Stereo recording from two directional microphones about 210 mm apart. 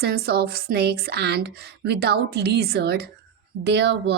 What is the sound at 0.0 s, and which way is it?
A woman's voice, 50° right (ahead or behind).